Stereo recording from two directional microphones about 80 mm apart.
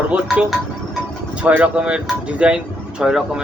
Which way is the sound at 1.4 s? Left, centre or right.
Centre.